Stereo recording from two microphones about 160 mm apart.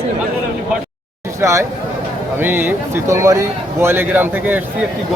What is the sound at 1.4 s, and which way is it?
Speech, 20° right (ahead or behind).